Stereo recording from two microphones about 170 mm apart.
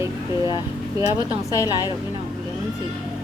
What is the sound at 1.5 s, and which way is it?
Speech, 20° left (ahead or behind).